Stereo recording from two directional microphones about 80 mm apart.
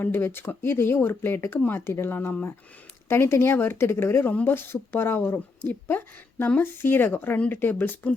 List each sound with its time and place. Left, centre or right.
0.0 s speech: left